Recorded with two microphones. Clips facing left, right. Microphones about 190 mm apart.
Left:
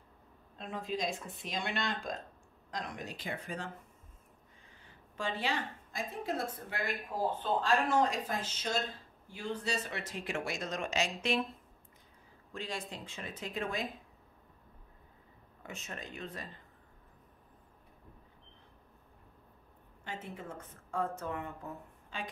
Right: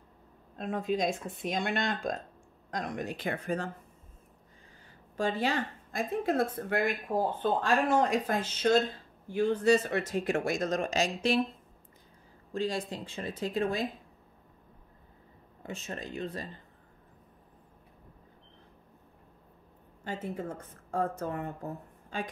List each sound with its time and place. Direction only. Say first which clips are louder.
0.6 s speech: right 7 dB; 50° right (ahead or behind)
5.1 s speech: right 6 dB; 45° right (ahead or behind)
12.5 s a woman's voice: right 9 dB; 35° right (ahead or behind)
15.6 s a woman's voice: right 6 dB; 30° right (ahead or behind)
20.1 s a woman's voice: right 7 dB; 40° right (ahead or behind)